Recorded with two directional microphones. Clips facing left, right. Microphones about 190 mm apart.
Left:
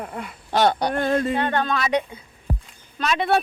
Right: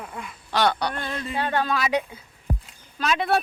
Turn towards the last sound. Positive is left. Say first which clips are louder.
# left 2 dB
turn(degrees=0)  # may be behind; listen again after turning